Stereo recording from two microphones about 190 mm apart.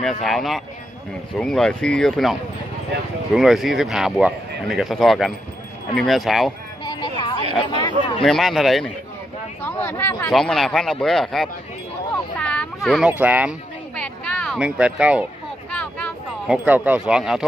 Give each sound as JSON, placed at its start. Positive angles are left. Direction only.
{"t": 0.0, "sound": "speech", "side_deg": 0}
{"t": 3.3, "sound": "speech", "side_deg": 0}
{"t": 6.8, "sound": "a sound", "side_deg": 25}
{"t": 7.8, "sound": "speech", "side_deg": 25}
{"t": 8.2, "sound": "speech", "side_deg": 0}
{"t": 10.3, "sound": "a child's voice", "side_deg": 0}
{"t": 13.9, "sound": "a sound", "side_deg": 5}
{"t": 15.7, "sound": "a sound", "side_deg": 5}
{"t": 16.5, "sound": "speech", "side_deg": -10}